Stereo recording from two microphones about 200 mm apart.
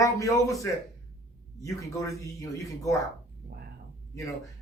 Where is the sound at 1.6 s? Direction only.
15° left (ahead or behind).